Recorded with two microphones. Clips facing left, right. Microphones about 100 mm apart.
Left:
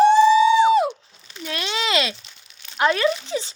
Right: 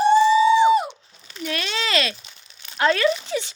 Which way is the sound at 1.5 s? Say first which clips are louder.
Left 1 dB; 20° left (ahead or behind).